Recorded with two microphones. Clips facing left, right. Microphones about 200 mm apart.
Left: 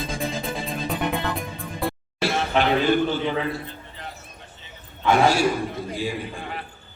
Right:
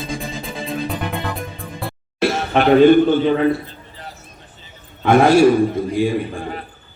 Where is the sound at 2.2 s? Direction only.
55° right (ahead or behind).